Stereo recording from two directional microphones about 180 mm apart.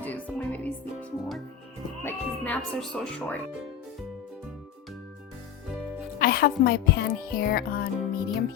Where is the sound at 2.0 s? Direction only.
10° left (ahead or behind).